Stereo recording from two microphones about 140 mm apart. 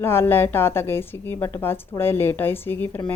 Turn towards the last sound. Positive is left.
turn(degrees=15)  # may be behind; listen again after turning